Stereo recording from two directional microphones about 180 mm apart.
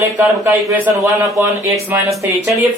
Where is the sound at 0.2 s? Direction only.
15° right (ahead or behind).